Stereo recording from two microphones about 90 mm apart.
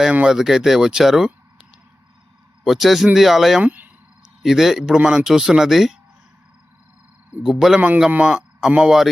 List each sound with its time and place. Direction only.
0.0 s speech: 10° right (ahead or behind)
2.6 s speech: centre (ahead or behind)
3.6 s speech: 20° right (ahead or behind)
4.4 s speech: 5° right (ahead or behind)
7.4 s speech: 5° right (ahead or behind)
7.8 s a man's voice: 15° right (ahead or behind)